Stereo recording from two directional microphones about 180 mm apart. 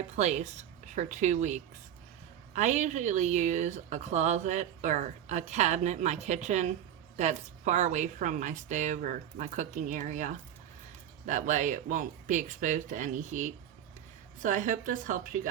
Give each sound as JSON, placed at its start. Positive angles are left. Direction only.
{"t": 0.2, "sound": "speech", "side_deg": -40}